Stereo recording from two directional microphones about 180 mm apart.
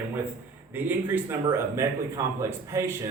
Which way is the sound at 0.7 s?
10° right (ahead or behind).